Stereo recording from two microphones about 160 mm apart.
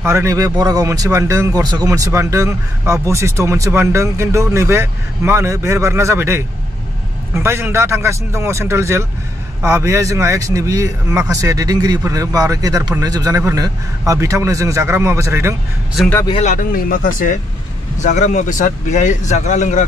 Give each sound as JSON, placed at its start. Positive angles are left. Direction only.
{"t": 0.0, "sound": "a man's voice", "side_deg": -15}
{"t": 16.3, "sound": "speech", "side_deg": 55}